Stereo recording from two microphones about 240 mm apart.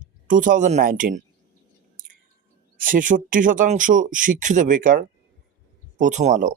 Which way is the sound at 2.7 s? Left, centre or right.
Right.